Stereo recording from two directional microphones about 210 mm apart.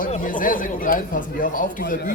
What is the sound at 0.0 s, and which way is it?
A man's voice, 40° left (ahead or behind).